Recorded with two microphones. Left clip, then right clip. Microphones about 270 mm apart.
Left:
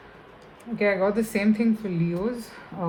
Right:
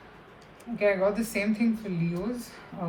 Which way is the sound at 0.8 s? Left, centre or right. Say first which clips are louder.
Left 2 dB; left.